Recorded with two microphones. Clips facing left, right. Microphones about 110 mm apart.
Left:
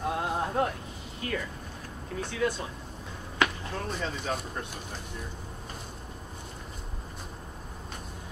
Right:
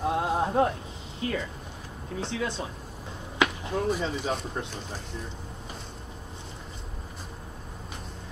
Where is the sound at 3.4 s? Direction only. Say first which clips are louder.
Right 3 dB; 15° right (ahead or behind).